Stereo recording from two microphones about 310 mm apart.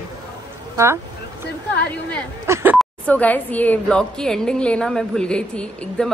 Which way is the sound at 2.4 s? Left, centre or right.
Centre.